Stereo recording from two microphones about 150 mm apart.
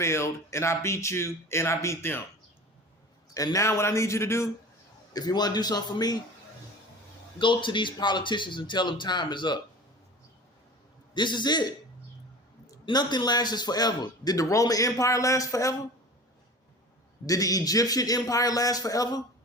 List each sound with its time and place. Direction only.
0.0 s a man's voice: 20° left (ahead or behind)
3.3 s a man's voice: 20° left (ahead or behind)
7.3 s speech: 30° left (ahead or behind)
11.1 s speech: 30° left (ahead or behind)
12.8 s a man's voice: 30° left (ahead or behind)
17.2 s a man's voice: 25° left (ahead or behind)